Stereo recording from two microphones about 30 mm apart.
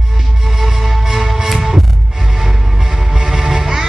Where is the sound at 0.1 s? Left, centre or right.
Centre.